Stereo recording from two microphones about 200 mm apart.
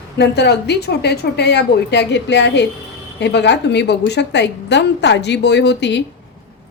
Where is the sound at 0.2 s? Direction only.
55° left (ahead or behind).